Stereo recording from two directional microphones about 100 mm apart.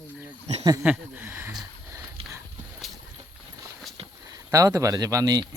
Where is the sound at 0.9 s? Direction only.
15° right (ahead or behind).